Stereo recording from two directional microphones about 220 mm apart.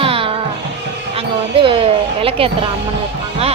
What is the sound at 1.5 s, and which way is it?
A woman's voice, 25° right (ahead or behind).